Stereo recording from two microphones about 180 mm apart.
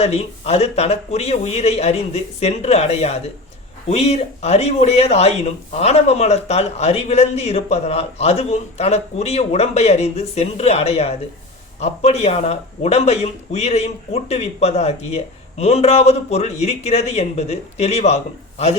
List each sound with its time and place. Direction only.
0.0 s speech: 35° left (ahead or behind)